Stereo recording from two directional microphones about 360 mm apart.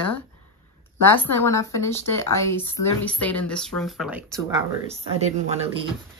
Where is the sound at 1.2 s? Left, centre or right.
Centre.